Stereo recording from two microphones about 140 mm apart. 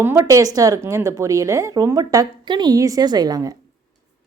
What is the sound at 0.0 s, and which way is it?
Speech, 20° right (ahead or behind).